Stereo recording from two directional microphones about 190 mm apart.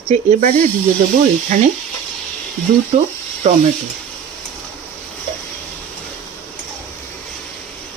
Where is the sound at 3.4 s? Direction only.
35° right (ahead or behind).